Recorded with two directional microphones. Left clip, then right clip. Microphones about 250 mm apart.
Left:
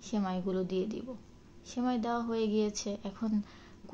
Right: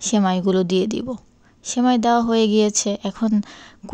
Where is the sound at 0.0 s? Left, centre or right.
Right.